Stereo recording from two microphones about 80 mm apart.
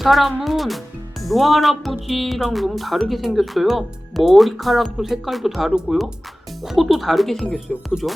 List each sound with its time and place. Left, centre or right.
0.0 s speech: centre
7.4 s speech: centre
7.9 s speech: centre